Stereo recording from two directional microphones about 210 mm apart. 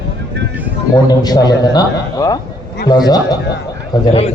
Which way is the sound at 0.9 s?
20° left (ahead or behind).